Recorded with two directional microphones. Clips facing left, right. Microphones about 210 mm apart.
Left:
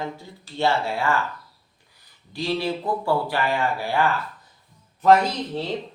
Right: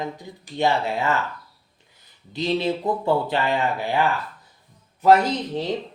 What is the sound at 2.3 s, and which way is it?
Speech, 20° right (ahead or behind).